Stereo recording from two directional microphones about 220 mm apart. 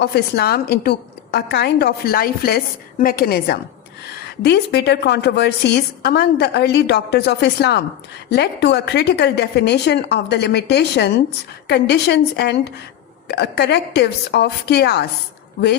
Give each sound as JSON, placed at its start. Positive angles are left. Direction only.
{"t": 0.0, "sound": "a woman's voice", "side_deg": 45}